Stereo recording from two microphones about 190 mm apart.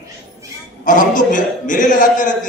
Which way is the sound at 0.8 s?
45° left (ahead or behind).